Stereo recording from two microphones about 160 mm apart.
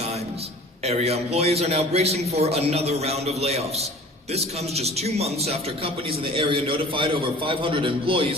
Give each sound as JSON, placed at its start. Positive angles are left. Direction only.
{"t": 0.9, "sound": "a man's voice", "side_deg": -40}